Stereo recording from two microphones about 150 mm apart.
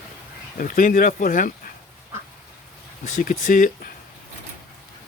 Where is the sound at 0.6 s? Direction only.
70° left (ahead or behind).